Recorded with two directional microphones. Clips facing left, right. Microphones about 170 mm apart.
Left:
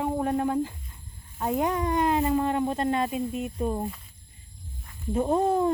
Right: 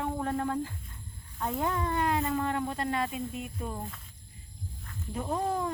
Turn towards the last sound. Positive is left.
turn(degrees=25)  # may be behind; listen again after turning